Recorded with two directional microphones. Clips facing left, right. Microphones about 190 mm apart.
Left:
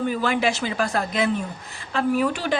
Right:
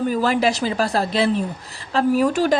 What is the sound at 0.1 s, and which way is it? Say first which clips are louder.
Speech: right 4 dB; 40° right (ahead or behind).